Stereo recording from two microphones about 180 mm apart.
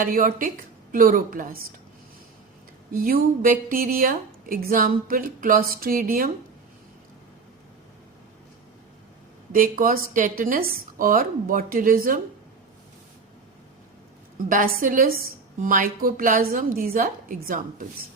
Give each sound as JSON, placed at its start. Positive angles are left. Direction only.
{"t": 0.0, "sound": "a woman's voice", "side_deg": -50}
{"t": 2.9, "sound": "a woman's voice", "side_deg": -55}
{"t": 9.5, "sound": "a woman's voice", "side_deg": -50}
{"t": 14.5, "sound": "a woman's voice", "side_deg": -50}